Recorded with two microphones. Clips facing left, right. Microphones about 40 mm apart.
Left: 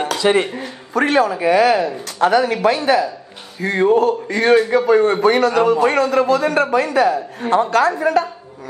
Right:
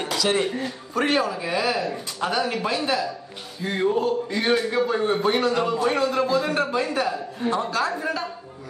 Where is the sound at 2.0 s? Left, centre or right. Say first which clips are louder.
Left 10 dB; left.